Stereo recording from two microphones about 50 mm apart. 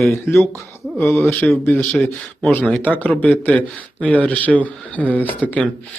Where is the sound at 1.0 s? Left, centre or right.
Left.